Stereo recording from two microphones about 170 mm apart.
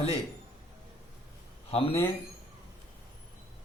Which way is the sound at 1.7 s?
35° left (ahead or behind).